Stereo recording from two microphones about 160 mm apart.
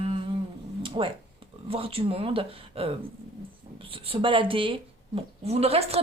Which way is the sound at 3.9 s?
35° right (ahead or behind).